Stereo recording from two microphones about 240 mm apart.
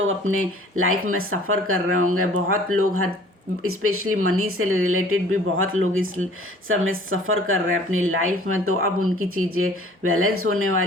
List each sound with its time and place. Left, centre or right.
0.8 s speech: right